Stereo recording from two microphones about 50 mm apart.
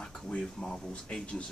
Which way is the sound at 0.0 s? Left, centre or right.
Centre.